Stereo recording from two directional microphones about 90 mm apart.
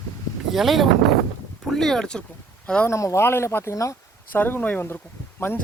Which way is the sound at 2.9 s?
30° left (ahead or behind).